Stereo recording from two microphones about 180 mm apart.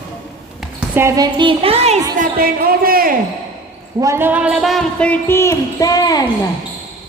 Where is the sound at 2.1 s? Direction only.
55° right (ahead or behind).